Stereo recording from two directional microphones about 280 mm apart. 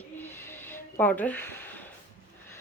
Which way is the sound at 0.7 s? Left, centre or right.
Centre.